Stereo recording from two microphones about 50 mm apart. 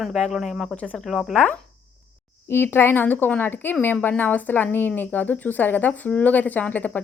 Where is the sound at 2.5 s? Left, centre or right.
Left.